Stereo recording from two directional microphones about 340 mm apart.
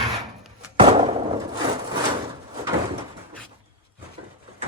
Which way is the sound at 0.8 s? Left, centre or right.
Centre.